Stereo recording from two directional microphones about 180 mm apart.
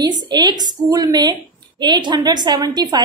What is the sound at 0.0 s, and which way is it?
A woman's voice, 25° right (ahead or behind).